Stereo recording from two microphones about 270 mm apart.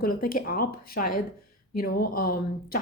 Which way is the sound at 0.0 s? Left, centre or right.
Left.